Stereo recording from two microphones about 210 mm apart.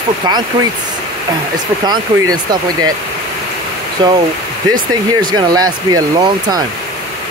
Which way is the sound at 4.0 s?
20° right (ahead or behind).